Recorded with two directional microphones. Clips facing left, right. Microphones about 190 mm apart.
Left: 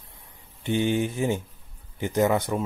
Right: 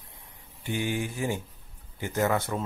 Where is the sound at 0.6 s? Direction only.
25° left (ahead or behind).